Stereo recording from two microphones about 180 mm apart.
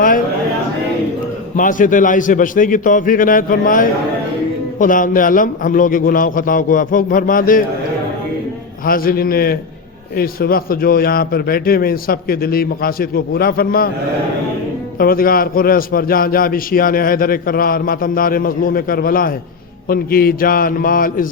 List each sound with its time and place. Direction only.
1.5 s a man's voice: 50° left (ahead or behind)
8.8 s a man's voice: 55° left (ahead or behind)
14.9 s a man's voice: 55° left (ahead or behind)